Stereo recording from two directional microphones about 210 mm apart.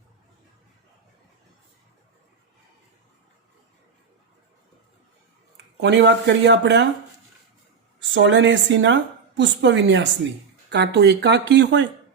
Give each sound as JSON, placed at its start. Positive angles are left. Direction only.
{"t": 5.8, "sound": "a woman's voice", "side_deg": -55}
{"t": 8.1, "sound": "a woman's voice", "side_deg": -60}